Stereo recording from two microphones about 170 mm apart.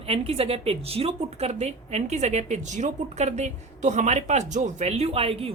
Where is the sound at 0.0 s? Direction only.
35° right (ahead or behind).